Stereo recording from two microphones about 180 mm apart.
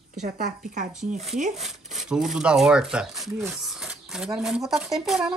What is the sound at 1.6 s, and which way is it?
Speech, centre (ahead or behind).